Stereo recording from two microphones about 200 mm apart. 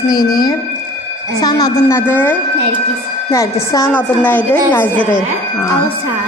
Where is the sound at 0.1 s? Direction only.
20° left (ahead or behind).